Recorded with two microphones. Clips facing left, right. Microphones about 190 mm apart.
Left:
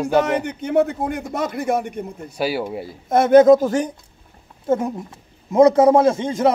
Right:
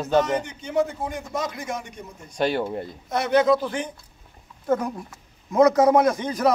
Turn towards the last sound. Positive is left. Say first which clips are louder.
# left 4 dB
turn(degrees=25)  # may be behind; listen again after turning